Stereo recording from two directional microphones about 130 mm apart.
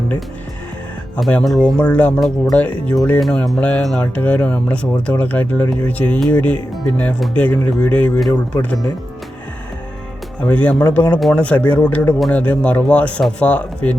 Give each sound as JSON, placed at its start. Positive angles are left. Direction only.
{"t": 1.1, "sound": "speech", "side_deg": 10}
{"t": 8.3, "sound": "speech", "side_deg": 25}
{"t": 10.4, "sound": "speech", "side_deg": 10}